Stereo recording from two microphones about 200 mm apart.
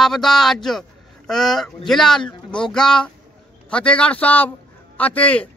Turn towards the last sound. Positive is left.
turn(degrees=5)  # may be behind; listen again after turning